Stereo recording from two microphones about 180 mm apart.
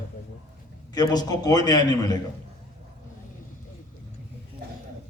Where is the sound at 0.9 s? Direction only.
20° left (ahead or behind).